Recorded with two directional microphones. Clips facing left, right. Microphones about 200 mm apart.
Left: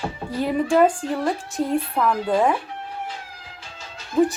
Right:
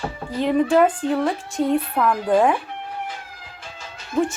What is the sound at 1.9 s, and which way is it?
Speech, centre (ahead or behind).